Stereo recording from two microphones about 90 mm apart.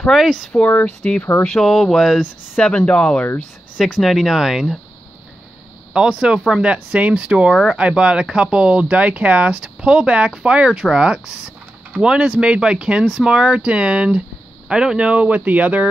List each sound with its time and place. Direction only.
0.0 s speech: centre (ahead or behind)
0.6 s speech: 20° left (ahead or behind)
1.4 s speech: 5° left (ahead or behind)
2.5 s speech: 15° left (ahead or behind)
3.7 s speech: centre (ahead or behind)
5.9 s speech: 10° right (ahead or behind)